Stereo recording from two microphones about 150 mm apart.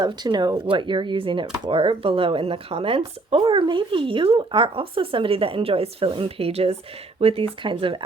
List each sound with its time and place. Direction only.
0.0 s speech: 30° right (ahead or behind)